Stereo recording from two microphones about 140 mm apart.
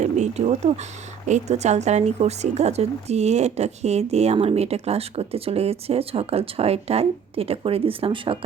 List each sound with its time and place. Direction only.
0.0 s speech: 55° right (ahead or behind)